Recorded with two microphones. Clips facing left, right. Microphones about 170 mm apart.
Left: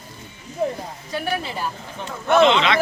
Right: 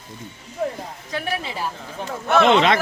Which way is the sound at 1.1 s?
Centre (ahead or behind).